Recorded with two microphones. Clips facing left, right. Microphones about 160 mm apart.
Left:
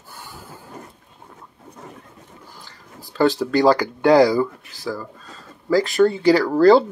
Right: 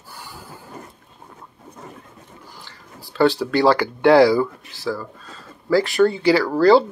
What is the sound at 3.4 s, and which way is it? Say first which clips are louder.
Speech: left 1 dB; 40° left (ahead or behind).